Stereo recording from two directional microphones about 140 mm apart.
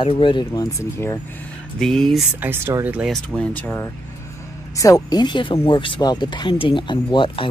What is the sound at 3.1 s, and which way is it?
Speech, 5° left (ahead or behind).